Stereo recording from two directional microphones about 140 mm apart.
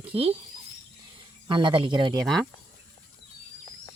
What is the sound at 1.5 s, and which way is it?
Speech, 35° right (ahead or behind).